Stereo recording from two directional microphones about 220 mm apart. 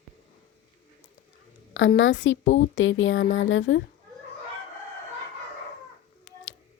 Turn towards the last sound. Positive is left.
turn(degrees=55)  # may be behind; listen again after turning